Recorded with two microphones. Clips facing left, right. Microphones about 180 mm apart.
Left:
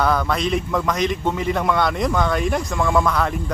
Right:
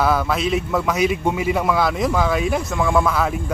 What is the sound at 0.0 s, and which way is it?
A man's voice, 5° right (ahead or behind).